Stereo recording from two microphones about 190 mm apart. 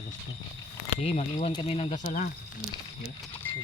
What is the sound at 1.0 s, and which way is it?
Speech, 35° left (ahead or behind).